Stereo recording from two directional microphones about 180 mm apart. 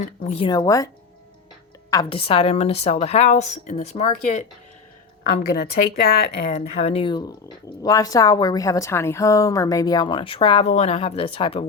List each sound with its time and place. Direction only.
0.0 s speech: 40° left (ahead or behind)
0.4 s speech: 20° left (ahead or behind)
2.0 s speech: 30° left (ahead or behind)
5.5 s speech: 65° left (ahead or behind)
6.5 s speech: 35° left (ahead or behind)